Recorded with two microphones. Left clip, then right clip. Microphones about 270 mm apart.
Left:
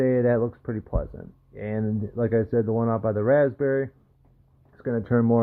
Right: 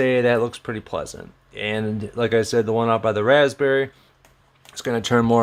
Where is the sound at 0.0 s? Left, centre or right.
Centre.